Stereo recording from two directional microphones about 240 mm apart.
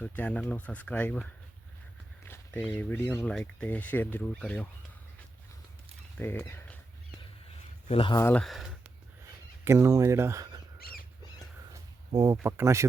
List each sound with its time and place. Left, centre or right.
0.0 s speech: centre
6.1 s speech: centre
7.9 s speech: left; by 8.6 s centre
9.6 s speech: centre
10.8 s squawk: left
11.7 s a sound: centre
12.4 s speech: centre